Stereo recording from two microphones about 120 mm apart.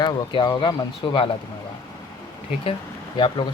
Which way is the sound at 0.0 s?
40° left (ahead or behind).